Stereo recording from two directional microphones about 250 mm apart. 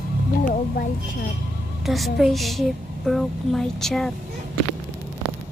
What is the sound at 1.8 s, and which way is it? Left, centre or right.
A woman's voice, centre.